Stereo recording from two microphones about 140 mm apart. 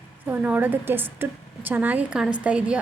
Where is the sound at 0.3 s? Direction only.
10° right (ahead or behind).